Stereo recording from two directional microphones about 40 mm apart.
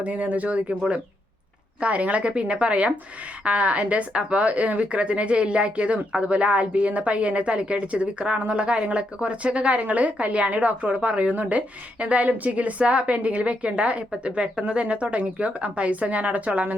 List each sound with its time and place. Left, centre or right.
0.0 s a woman's voice: right
1.8 s a woman's voice: right
14.3 s a woman's voice: right